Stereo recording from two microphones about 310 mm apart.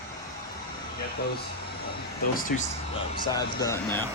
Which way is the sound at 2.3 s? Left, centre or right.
Left.